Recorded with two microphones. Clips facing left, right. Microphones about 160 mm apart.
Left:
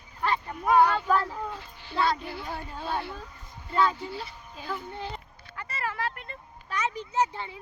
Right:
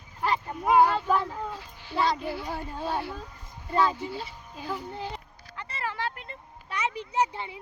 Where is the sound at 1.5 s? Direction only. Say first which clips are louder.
Even; 10° right (ahead or behind).